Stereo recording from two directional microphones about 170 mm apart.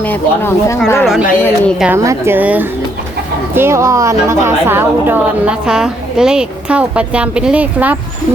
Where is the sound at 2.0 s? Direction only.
15° right (ahead or behind).